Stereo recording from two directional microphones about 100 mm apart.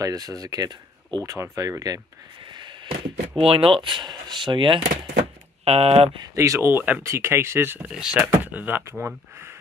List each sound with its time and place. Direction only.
0.0 s speech: 35° right (ahead or behind)
1.2 s speech: 30° right (ahead or behind)
2.4 s speech: 50° right (ahead or behind)
5.7 s speech: 90° right
6.3 s speech: 30° right (ahead or behind)
7.8 s speech: 5° right (ahead or behind)
8.5 s speech: 15° right (ahead or behind)